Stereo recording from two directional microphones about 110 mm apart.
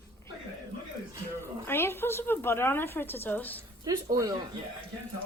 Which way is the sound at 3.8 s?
35° right (ahead or behind).